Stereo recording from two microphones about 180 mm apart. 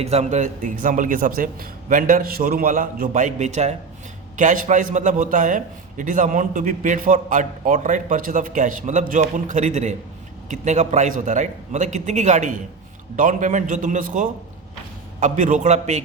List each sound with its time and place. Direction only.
0.0 s a man's voice: 35° right (ahead or behind)